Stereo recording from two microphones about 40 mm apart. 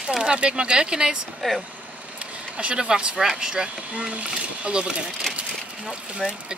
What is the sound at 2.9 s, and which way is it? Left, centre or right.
Speech, right.